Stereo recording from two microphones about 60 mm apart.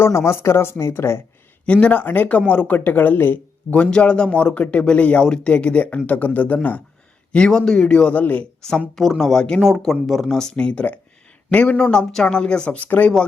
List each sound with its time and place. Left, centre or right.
0.0 s speech: left
1.6 s a man's voice: centre
3.7 s a man's voice: centre
7.3 s speech: centre
8.2 s a man's voice: left
9.0 s speech: centre
9.6 s speech: centre; by 13.1 s left